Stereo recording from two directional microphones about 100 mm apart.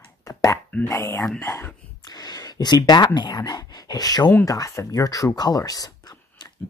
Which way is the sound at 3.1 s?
45° left (ahead or behind).